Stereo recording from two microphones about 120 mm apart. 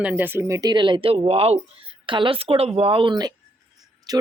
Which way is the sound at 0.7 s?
40° right (ahead or behind).